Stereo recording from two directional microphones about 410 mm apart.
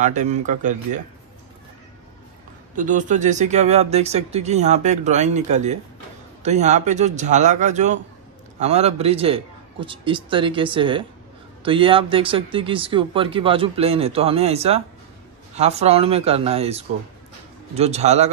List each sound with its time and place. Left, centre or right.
0.0 s speech: centre
2.7 s speech: centre